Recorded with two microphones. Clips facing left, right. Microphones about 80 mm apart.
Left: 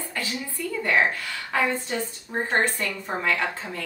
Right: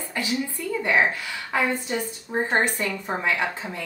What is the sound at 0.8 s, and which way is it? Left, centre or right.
A woman's voice, centre.